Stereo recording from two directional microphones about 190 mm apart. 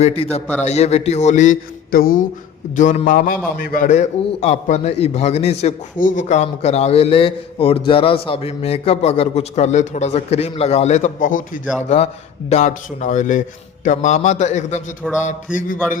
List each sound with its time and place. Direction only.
0.0 s a man's voice: 30° left (ahead or behind)
15.0 s a sound: 5° right (ahead or behind)
15.5 s speech: 45° left (ahead or behind)